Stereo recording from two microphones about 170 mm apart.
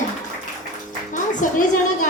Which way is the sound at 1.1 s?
50° left (ahead or behind).